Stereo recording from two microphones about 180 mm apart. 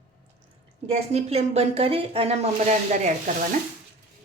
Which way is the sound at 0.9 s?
35° right (ahead or behind).